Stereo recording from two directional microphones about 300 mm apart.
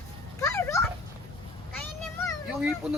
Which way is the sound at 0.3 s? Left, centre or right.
Centre.